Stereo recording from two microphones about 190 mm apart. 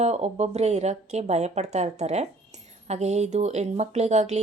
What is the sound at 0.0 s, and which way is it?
Speech, 35° right (ahead or behind).